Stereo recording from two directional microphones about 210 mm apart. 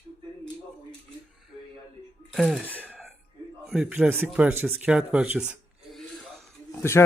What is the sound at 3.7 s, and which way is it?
Speech, 5° right (ahead or behind).